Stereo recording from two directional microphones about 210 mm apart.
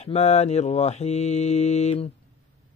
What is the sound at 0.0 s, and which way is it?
Mantra, 30° left (ahead or behind).